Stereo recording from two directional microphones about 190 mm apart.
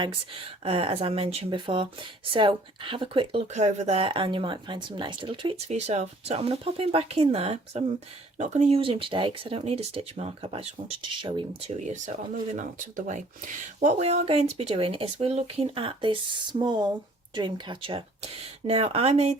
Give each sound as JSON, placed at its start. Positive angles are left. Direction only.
{"t": 0.6, "sound": "speech", "side_deg": -30}
{"t": 11.8, "sound": "speech", "side_deg": -40}